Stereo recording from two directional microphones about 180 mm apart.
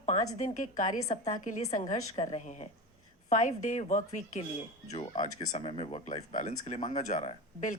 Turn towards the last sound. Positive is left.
turn(degrees=40)  # may be behind; listen again after turning